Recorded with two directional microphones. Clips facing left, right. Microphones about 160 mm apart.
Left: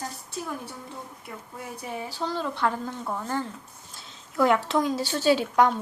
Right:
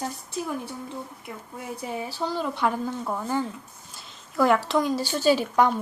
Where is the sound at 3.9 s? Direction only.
Centre (ahead or behind).